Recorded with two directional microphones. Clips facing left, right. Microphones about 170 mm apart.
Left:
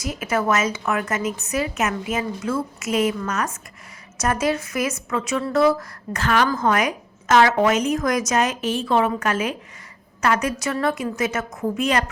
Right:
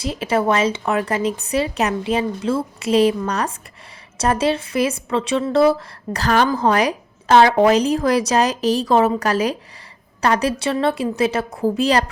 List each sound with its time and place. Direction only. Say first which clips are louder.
0.0 s a woman's voice: right 4 dB; 30° right (ahead or behind)